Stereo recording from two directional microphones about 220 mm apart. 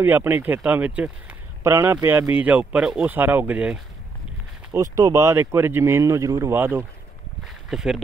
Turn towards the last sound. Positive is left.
turn(degrees=0)  # may be behind; listen again after turning